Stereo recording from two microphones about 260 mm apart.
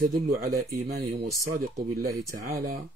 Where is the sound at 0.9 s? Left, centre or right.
Right.